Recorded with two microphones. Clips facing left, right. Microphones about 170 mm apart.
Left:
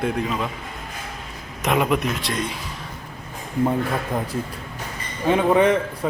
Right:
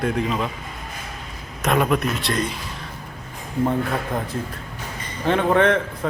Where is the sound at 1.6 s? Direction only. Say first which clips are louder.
Right 1 dB; 10° left (ahead or behind).